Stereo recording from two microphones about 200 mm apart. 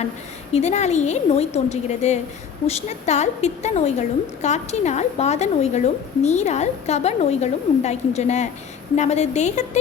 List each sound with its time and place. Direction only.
0.5 s a woman's voice: 35° left (ahead or behind)